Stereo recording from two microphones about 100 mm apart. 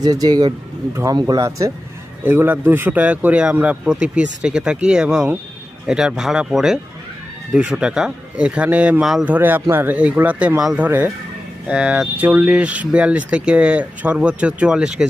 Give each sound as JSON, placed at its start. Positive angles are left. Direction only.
{"t": 0.0, "sound": "speech", "side_deg": -40}
{"t": 2.2, "sound": "speech", "side_deg": -20}
{"t": 9.2, "sound": "speech", "side_deg": -20}